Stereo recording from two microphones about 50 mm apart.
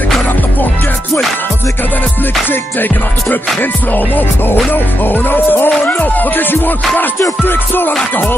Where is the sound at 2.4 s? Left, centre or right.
Left.